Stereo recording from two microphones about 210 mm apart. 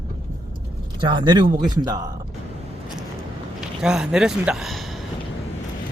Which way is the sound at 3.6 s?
5° right (ahead or behind).